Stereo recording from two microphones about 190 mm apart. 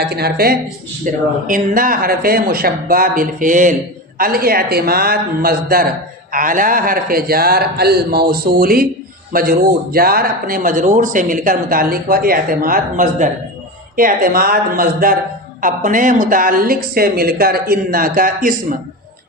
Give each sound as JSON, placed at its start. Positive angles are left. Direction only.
{"t": 0.0, "sound": "a woman's voice", "side_deg": -55}
{"t": 1.1, "sound": "speech", "side_deg": -40}